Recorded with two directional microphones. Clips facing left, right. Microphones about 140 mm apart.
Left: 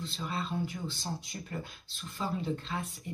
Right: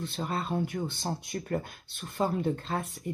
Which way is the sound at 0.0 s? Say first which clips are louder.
Right 4 dB; 55° right (ahead or behind).